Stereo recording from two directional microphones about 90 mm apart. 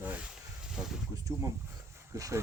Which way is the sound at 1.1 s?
40° right (ahead or behind).